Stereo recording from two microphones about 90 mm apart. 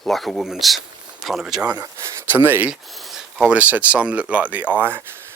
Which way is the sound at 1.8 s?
30° right (ahead or behind).